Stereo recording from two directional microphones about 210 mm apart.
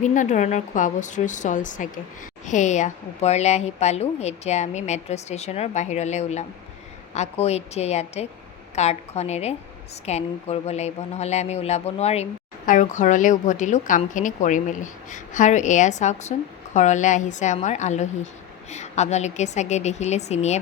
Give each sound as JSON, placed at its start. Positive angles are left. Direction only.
{"t": 0.0, "sound": "speech", "side_deg": 35}